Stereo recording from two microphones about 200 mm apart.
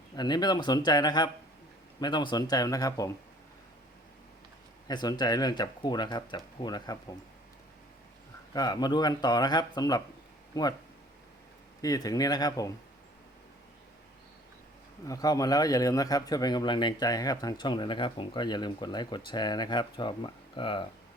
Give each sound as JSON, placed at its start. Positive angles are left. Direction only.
{"t": 0.2, "sound": "speech", "side_deg": 20}
{"t": 4.9, "sound": "speech", "side_deg": 20}
{"t": 8.5, "sound": "speech", "side_deg": 20}
{"t": 11.8, "sound": "speech", "side_deg": 20}
{"t": 15.0, "sound": "speech", "side_deg": 15}